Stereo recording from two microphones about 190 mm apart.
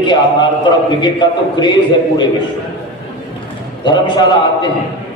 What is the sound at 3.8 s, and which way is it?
Speech, 25° left (ahead or behind).